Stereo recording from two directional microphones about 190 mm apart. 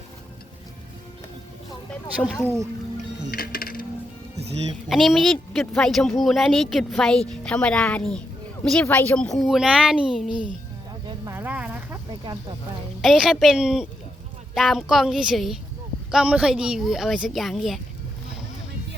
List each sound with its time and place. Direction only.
2.2 s speech: centre (ahead or behind)
3.3 s music: 50° left (ahead or behind)
4.9 s speech: centre (ahead or behind)
11.0 s a sound: 15° right (ahead or behind)
12.2 s speech: 20° right (ahead or behind)
13.0 s speech: centre (ahead or behind)